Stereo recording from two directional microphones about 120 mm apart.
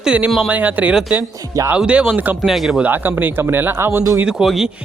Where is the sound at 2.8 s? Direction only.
15° right (ahead or behind).